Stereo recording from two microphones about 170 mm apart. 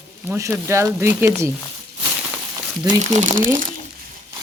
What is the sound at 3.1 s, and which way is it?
Speech, 45° right (ahead or behind).